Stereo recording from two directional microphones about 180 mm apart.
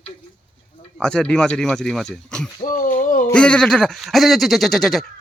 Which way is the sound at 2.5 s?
50° left (ahead or behind).